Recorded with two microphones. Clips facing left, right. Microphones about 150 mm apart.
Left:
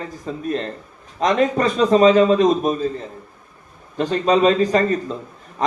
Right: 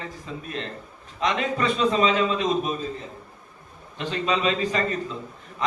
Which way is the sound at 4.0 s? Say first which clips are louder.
Left 9 dB; 40° left (ahead or behind).